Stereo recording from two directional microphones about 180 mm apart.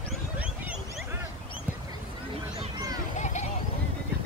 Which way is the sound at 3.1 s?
40° left (ahead or behind).